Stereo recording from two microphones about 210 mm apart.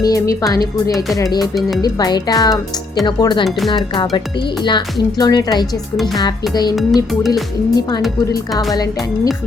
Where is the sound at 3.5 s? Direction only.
Centre (ahead or behind).